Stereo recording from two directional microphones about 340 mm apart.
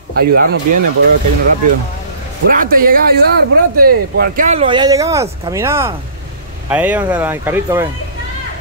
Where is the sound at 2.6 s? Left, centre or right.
Right.